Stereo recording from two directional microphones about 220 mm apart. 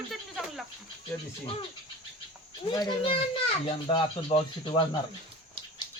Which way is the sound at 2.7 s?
20° left (ahead or behind).